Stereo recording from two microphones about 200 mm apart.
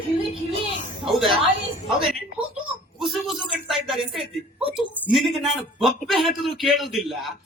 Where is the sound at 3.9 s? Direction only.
Centre (ahead or behind).